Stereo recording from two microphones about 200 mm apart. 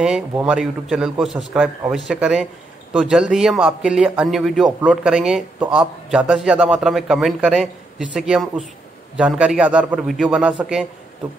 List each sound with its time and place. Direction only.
0.0 s speech: 5° right (ahead or behind)